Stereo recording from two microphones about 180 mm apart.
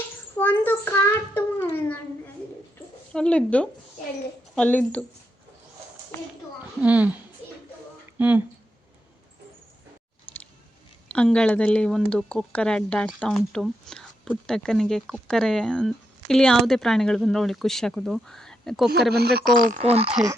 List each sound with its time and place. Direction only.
0.3 s a sound: 10° left (ahead or behind)
3.1 s speech: 5° left (ahead or behind)
6.7 s a woman's voice: 10° right (ahead or behind)
8.2 s a woman's voice: 10° right (ahead or behind)
11.1 s speech: 5° left (ahead or behind)
19.1 s speech: 60° right (ahead or behind); by 20.1 s 35° right (ahead or behind)